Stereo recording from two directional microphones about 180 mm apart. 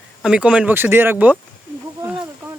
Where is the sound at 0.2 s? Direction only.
5° right (ahead or behind).